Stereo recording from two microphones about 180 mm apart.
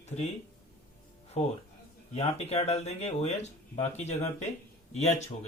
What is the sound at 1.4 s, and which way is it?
Speech, 40° left (ahead or behind).